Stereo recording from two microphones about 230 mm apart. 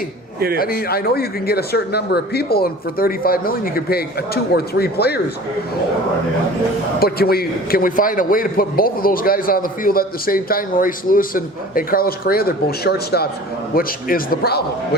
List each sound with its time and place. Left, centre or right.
0.3 s speech: right
0.6 s a man's voice: left
7.0 s a man's voice: left